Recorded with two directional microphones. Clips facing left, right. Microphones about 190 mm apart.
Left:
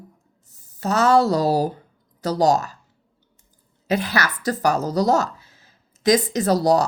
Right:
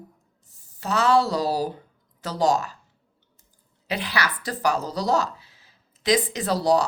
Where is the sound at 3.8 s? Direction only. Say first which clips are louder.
Left 5 dB; 45° left (ahead or behind).